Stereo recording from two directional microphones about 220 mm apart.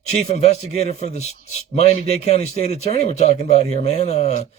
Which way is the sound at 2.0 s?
30° left (ahead or behind).